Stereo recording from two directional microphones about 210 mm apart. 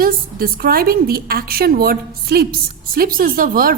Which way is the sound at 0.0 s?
45° right (ahead or behind).